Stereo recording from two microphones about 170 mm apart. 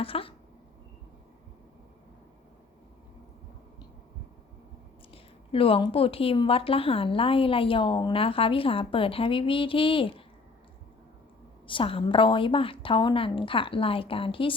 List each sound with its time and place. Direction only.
0.0 s a sound: 35° left (ahead or behind)
5.1 s a woman's voice: 30° left (ahead or behind)
11.6 s a woman's voice: 30° left (ahead or behind)